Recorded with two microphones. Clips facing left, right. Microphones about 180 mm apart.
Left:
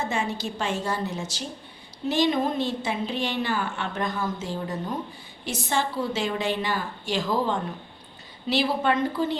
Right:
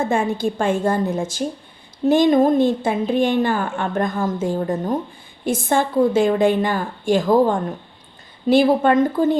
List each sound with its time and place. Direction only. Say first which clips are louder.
0.0 s a woman's voice: right 9 dB; 50° right (ahead or behind)